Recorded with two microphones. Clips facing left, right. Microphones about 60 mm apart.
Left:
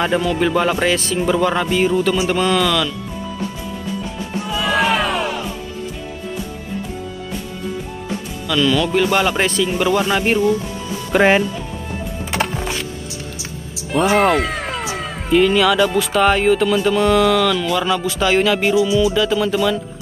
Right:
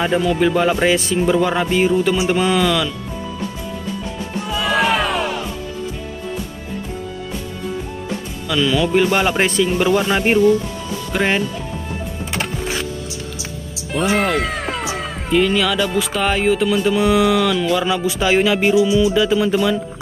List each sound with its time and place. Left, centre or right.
0.0 s speech: centre
0.8 s speech: right
1.1 s music: centre
4.5 s music: centre
8.5 s music: centre
11.1 s speech: centre
13.9 s speech: centre